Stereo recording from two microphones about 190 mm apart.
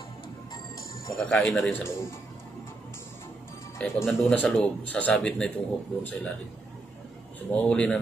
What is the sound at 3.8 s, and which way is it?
A man's voice, centre (ahead or behind).